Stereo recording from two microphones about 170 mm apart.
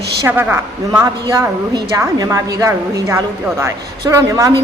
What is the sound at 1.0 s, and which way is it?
A woman's voice, 20° right (ahead or behind).